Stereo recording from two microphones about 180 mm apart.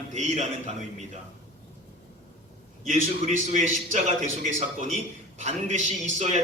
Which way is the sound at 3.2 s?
40° right (ahead or behind).